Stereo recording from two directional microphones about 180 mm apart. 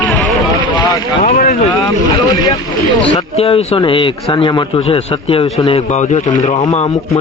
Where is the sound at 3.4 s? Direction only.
30° left (ahead or behind).